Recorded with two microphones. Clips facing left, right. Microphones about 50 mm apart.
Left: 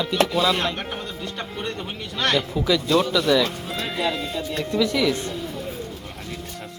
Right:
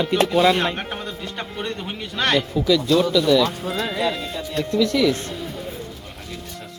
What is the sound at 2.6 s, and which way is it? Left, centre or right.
Speech, centre.